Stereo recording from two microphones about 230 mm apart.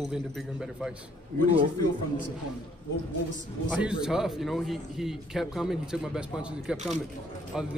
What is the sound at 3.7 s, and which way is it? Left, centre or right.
A man's voice, centre.